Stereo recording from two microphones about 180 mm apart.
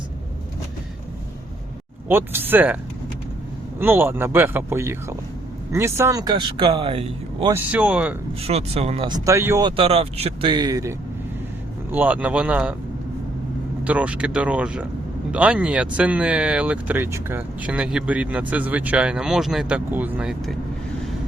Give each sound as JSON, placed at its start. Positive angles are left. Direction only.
{"t": 2.0, "sound": "speech", "side_deg": -10}
{"t": 3.8, "sound": "speech", "side_deg": -10}
{"t": 7.5, "sound": "speech", "side_deg": -5}
{"t": 8.4, "sound": "speech", "side_deg": -35}
{"t": 9.0, "sound": "speech", "side_deg": -20}
{"t": 9.6, "sound": "speech", "side_deg": -30}
{"t": 13.8, "sound": "speech", "side_deg": -5}